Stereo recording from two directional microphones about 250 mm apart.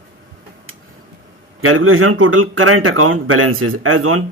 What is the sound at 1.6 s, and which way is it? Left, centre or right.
A man's voice, right.